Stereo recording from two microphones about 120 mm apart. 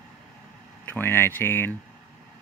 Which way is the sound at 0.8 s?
15° left (ahead or behind).